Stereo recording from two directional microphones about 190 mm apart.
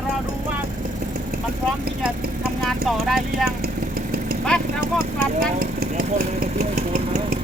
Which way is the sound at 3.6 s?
50° right (ahead or behind).